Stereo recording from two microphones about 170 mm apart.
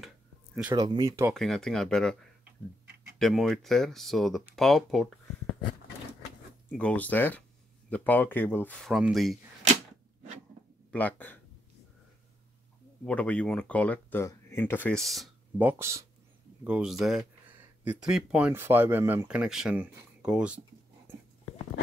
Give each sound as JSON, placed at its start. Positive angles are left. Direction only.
{"t": 0.7, "sound": "speech", "side_deg": -25}
{"t": 1.3, "sound": "speech", "side_deg": 5}
{"t": 3.2, "sound": "speech", "side_deg": 0}
{"t": 6.7, "sound": "speech", "side_deg": 5}
{"t": 10.9, "sound": "speech", "side_deg": 10}
{"t": 13.0, "sound": "speech", "side_deg": 5}
{"t": 15.6, "sound": "speech", "side_deg": -15}
{"t": 16.6, "sound": "speech", "side_deg": -5}
{"t": 21.1, "sound": "a sound", "side_deg": -15}